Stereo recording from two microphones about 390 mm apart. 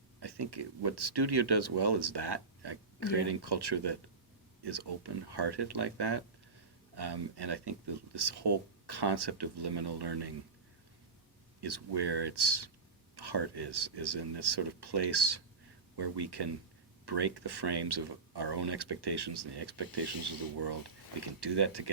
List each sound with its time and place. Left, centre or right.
0.2 s speech: right
11.6 s speech: right
21.2 s speech: right